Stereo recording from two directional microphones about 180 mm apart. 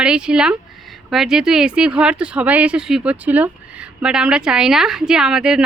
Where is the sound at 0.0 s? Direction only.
5° right (ahead or behind).